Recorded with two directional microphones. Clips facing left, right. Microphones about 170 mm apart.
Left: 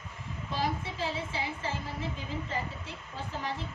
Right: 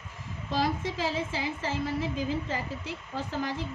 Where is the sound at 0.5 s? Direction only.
90° right.